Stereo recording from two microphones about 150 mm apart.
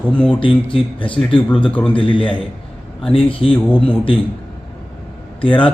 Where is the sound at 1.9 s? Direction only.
35° left (ahead or behind).